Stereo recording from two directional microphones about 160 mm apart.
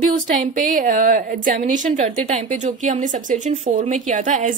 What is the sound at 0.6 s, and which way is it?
A woman's voice, 55° right (ahead or behind).